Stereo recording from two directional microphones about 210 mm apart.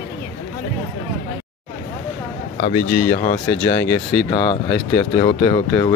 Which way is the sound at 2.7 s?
30° left (ahead or behind).